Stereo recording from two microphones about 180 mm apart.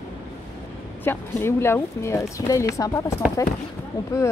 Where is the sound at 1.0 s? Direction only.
10° left (ahead or behind).